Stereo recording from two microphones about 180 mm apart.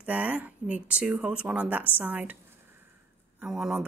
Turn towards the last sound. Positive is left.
turn(degrees=-5)  # may be behind; listen again after turning